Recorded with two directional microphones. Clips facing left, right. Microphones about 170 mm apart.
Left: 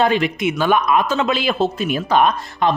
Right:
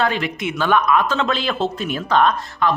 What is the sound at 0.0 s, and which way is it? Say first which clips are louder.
A woman's voice: left 4 dB; 15° left (ahead or behind).